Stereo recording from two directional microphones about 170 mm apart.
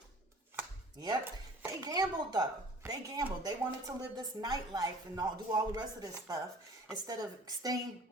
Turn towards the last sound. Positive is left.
turn(degrees=-20)  # may be behind; listen again after turning